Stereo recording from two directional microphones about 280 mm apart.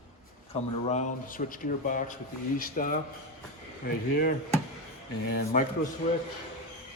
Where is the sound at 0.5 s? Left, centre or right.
Left.